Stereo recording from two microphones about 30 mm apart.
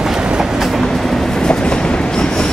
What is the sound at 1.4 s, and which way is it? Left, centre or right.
Train, left.